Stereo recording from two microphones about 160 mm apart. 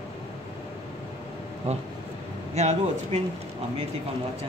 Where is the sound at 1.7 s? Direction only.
40° right (ahead or behind).